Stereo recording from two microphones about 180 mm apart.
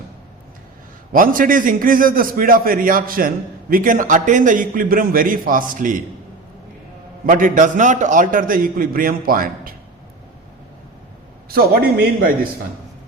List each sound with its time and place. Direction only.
1.1 s a man's voice: 50° right (ahead or behind)
7.3 s a man's voice: 50° right (ahead or behind)
11.4 s a man's voice: 55° right (ahead or behind)